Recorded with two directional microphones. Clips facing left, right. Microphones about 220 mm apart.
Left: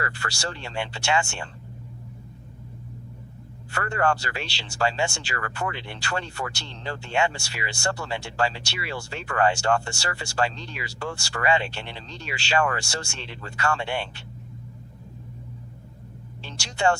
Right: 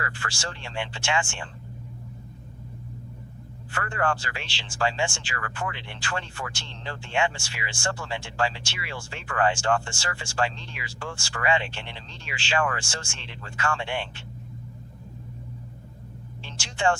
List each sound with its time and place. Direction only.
0.0 s speech: 40° left (ahead or behind)
3.7 s speech: 40° left (ahead or behind)
16.5 s speech: 40° left (ahead or behind)